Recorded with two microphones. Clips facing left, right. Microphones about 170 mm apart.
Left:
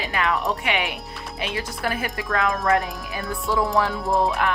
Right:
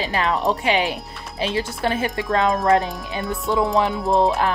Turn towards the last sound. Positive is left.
turn(degrees=0)  # may be behind; listen again after turning